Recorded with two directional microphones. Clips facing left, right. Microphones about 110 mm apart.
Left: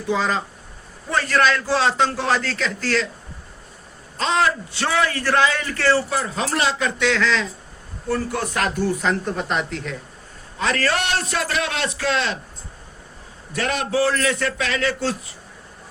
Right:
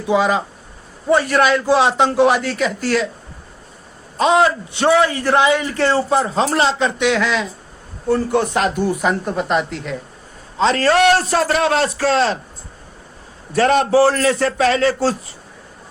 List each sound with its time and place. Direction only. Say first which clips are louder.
0.1 s a man's voice: right 6 dB; 15° right (ahead or behind)
4.2 s a man's voice: right 6 dB; 15° right (ahead or behind)
8.1 s a man's voice: right 7 dB; 25° right (ahead or behind); by 9.9 s 5° right (ahead or behind)
10.6 s a man's voice: right 8 dB; 30° right (ahead or behind)
13.5 s a man's voice: right 9 dB; 40° right (ahead or behind)